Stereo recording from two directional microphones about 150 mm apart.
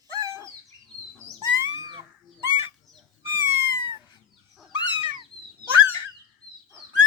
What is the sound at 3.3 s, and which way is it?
Cat, 20° right (ahead or behind).